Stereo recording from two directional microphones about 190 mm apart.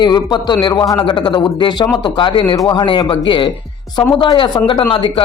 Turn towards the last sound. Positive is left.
turn(degrees=25)  # may be behind; listen again after turning